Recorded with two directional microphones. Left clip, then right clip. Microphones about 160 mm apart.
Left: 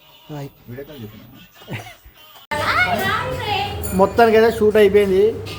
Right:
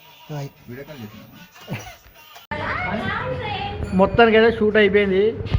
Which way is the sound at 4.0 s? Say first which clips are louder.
Left 1 dB; 15° left (ahead or behind).